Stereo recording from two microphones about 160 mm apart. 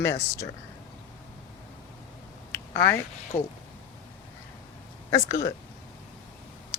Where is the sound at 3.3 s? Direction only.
15° left (ahead or behind).